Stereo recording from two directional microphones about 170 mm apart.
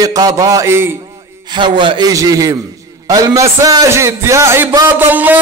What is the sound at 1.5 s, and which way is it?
A man's voice, 30° right (ahead or behind).